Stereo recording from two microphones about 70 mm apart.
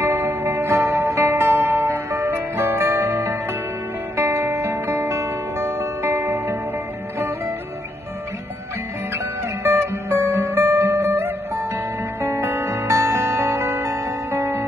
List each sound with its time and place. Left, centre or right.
0.0 s music: right
9.6 s music: right